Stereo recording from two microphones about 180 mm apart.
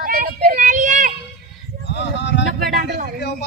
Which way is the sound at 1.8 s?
70° left (ahead or behind).